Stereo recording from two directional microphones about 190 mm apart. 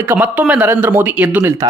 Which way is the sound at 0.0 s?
10° right (ahead or behind).